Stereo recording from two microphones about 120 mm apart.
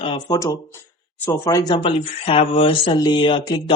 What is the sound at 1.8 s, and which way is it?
Speech, 50° left (ahead or behind).